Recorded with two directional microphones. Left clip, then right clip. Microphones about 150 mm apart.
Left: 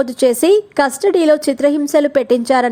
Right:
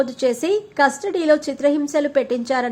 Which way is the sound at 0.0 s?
45° left (ahead or behind).